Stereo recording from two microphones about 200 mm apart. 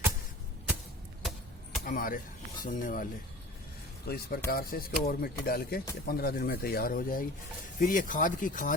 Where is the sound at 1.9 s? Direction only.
45° left (ahead or behind).